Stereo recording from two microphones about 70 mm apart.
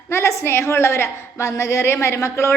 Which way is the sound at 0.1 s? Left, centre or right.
Left.